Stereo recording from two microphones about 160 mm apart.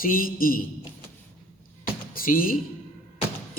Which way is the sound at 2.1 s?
60° left (ahead or behind).